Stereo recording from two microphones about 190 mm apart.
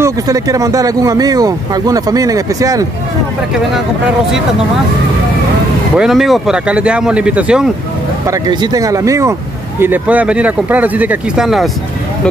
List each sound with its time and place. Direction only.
0.0 s speech: 20° right (ahead or behind)
5.9 s speech: centre (ahead or behind)
8.3 s speech: 20° right (ahead or behind); by 11.7 s centre (ahead or behind)